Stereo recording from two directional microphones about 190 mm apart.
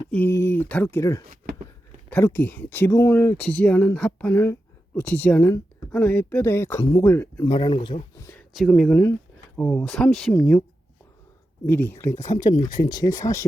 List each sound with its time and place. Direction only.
0.1 s speech: 10° left (ahead or behind)
1.3 s a sound: 45° right (ahead or behind)
2.0 s speech: 10° left (ahead or behind)
8.5 s speech: centre (ahead or behind)
11.6 s speech: 10° left (ahead or behind)